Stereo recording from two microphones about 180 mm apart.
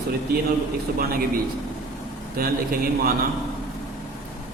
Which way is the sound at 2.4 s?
55° right (ahead or behind).